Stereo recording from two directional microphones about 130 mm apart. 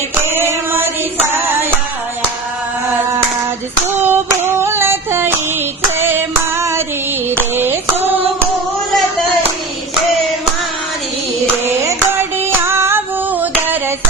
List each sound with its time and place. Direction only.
0.1 s singing: 15° right (ahead or behind)
4.0 s a sound: 15° right (ahead or behind)
6.0 s female singing: 15° right (ahead or behind)
7.3 s a sound: 15° right (ahead or behind)
11.6 s hands: 15° right (ahead or behind)
12.6 s female singing: 20° right (ahead or behind)